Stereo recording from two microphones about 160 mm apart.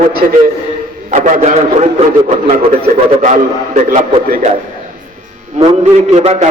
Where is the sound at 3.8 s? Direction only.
50° right (ahead or behind).